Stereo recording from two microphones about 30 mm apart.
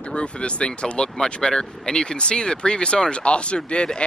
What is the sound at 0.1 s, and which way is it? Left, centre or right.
Speech, left.